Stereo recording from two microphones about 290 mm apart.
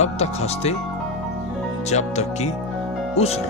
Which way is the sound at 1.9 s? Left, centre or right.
Left.